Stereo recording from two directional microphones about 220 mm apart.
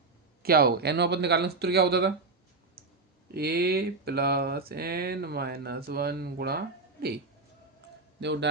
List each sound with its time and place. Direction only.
0.4 s speech: 45° right (ahead or behind)
3.3 s speech: 45° right (ahead or behind)
8.2 s speech: 50° right (ahead or behind)